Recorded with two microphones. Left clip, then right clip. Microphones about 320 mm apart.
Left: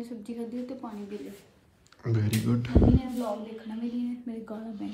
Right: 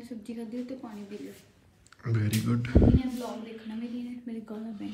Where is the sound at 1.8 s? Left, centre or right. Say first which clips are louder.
Left 2 dB; centre.